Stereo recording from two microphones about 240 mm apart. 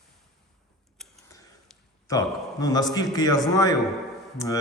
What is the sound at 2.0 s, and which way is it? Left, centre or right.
A man's voice, centre.